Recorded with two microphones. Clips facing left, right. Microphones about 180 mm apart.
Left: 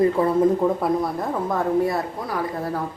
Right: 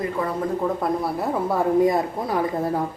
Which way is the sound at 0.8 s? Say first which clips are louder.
Left 1 dB; 5° right (ahead or behind).